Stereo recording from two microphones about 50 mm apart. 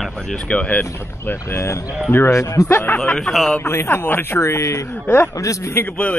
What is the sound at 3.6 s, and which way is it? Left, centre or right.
Speech, left.